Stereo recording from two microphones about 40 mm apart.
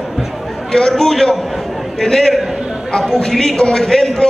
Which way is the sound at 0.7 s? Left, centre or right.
Centre.